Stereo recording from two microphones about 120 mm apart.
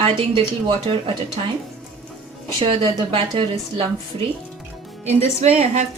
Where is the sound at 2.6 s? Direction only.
45° right (ahead or behind).